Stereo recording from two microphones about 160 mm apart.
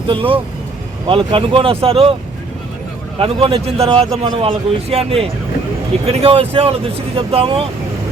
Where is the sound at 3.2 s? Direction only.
35° right (ahead or behind).